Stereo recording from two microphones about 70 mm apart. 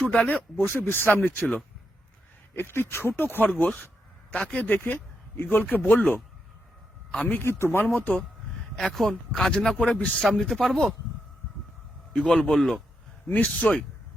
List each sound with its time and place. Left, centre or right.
0.1 s speech: left
0.5 s speech: left
2.6 s speech: left
4.3 s speech: centre
4.6 s speech: left
7.4 s speech: left
7.9 s speech: left
8.8 s speech: centre
10.2 s speech: centre
12.2 s speech: centre
12.5 s speech: centre
13.2 s speech: left